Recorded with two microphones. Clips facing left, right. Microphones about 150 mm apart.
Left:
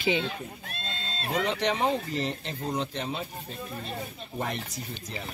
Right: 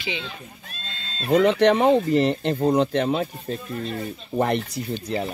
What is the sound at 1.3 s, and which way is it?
Speech, 60° right (ahead or behind).